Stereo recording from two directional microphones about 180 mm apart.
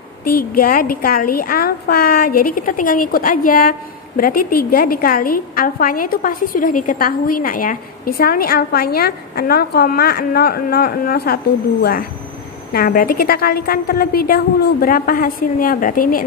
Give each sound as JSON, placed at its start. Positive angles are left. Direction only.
{"t": 0.2, "sound": "a woman's voice", "side_deg": 55}